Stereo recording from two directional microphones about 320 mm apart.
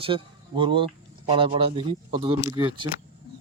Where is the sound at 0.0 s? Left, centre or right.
Centre.